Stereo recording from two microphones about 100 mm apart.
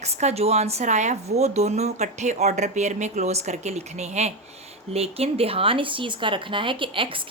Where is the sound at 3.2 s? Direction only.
90° right.